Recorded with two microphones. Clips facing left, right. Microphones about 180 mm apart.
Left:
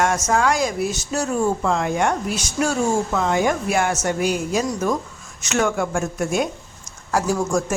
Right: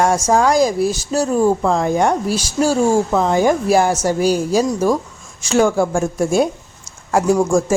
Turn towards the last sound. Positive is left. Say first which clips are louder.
# right 6 dB
turn(degrees=-25)  # may be behind; listen again after turning